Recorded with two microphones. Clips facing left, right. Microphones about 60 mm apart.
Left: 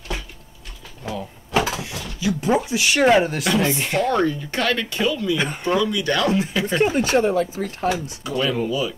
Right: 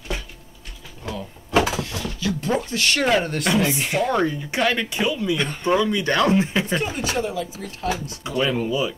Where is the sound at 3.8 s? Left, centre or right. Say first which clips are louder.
Left 1 dB; centre.